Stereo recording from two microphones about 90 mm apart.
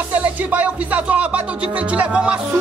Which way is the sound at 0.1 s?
15° right (ahead or behind).